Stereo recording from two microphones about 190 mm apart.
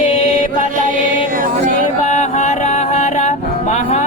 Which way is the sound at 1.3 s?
45° right (ahead or behind).